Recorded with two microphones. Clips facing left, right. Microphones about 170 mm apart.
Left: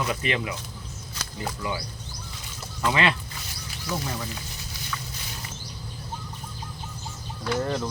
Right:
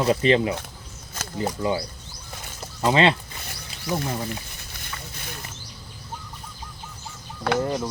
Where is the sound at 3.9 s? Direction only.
55° right (ahead or behind).